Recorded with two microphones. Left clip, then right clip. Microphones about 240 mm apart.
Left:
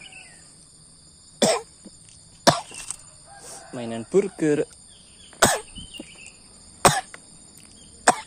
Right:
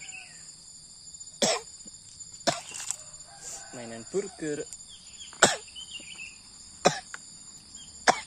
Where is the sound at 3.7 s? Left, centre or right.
Left.